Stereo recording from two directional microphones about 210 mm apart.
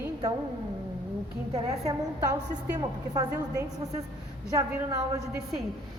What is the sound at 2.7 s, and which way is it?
A woman's voice, 15° right (ahead or behind).